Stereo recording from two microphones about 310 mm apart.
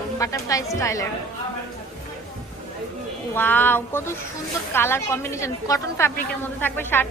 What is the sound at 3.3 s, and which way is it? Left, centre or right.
A woman's voice, centre.